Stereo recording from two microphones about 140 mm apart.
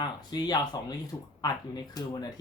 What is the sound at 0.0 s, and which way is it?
Speech, 30° left (ahead or behind).